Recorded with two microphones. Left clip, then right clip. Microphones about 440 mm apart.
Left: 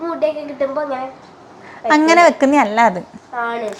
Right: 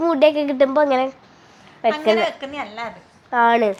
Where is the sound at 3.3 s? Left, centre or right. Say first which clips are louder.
Right 7 dB; right.